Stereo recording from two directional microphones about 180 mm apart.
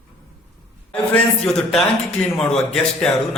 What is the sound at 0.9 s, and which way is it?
A man's voice, 5° left (ahead or behind).